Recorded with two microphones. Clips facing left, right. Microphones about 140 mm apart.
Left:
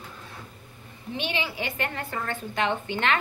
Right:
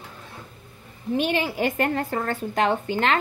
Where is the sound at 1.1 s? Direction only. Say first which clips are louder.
Right 7 dB; 45° right (ahead or behind).